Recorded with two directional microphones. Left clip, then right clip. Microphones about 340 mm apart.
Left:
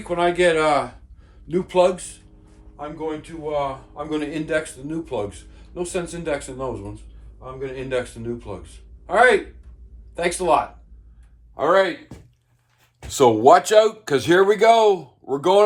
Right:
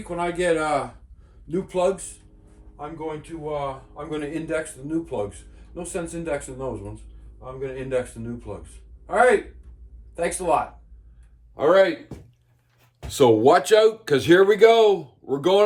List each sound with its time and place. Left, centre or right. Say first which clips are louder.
0.0 s speech: left 6 dB; centre
13.1 s speech: left 3 dB; centre